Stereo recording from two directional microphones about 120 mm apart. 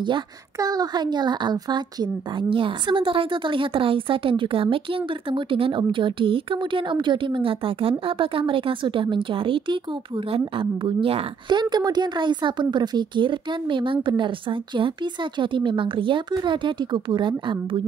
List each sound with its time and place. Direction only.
0.6 s a woman's voice: 30° right (ahead or behind)